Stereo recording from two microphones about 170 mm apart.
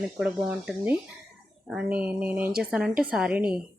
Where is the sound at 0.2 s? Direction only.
5° right (ahead or behind).